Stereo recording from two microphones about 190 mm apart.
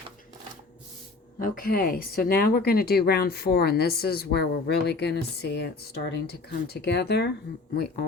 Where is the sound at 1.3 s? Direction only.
45° left (ahead or behind).